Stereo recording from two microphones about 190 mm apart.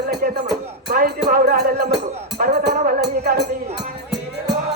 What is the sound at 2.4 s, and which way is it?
Music, 50° right (ahead or behind).